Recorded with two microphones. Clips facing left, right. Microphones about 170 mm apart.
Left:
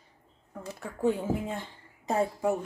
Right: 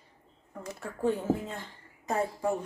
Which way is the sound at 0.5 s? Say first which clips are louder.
Even; 5° left (ahead or behind).